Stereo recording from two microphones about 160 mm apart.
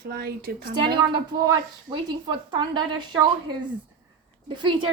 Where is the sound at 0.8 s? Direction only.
30° right (ahead or behind).